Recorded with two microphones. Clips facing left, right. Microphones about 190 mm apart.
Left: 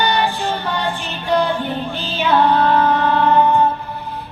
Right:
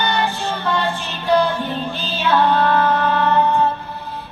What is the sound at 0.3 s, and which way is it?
Music, 15° left (ahead or behind).